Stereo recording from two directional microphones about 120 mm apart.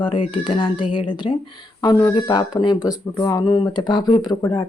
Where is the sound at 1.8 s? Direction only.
30° left (ahead or behind).